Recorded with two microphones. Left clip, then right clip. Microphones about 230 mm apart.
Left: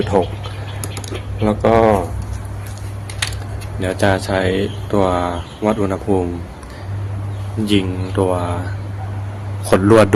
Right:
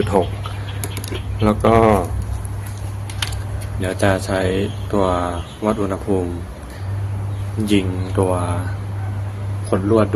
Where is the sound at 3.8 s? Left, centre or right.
Centre.